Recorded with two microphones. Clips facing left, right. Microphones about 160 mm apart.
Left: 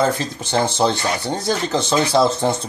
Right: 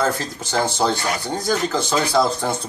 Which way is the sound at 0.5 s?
25° left (ahead or behind).